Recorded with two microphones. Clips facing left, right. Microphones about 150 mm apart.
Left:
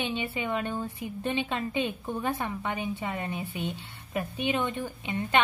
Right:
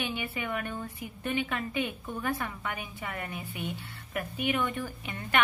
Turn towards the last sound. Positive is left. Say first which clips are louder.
# left 5 dB
turn(degrees=20)  # may be behind; listen again after turning